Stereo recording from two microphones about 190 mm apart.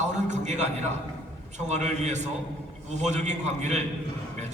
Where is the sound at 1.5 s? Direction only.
40° right (ahead or behind).